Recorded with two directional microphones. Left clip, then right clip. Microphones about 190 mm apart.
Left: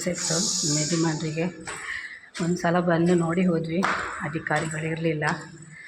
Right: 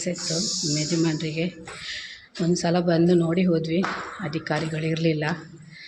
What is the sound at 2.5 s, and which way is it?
A woman's voice, 25° right (ahead or behind).